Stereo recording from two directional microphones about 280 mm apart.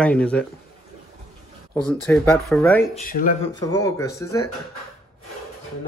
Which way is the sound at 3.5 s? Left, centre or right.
Centre.